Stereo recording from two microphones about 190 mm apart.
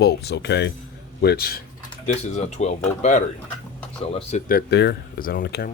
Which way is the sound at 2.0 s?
35° left (ahead or behind).